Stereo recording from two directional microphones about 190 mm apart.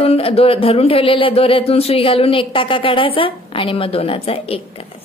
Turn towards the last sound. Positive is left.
turn(degrees=30)  # may be behind; listen again after turning